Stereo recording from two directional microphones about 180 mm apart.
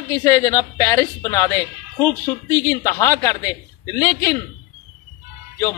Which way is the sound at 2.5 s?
15° left (ahead or behind).